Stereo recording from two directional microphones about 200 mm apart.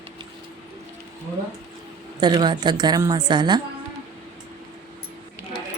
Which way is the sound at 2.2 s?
20° right (ahead or behind).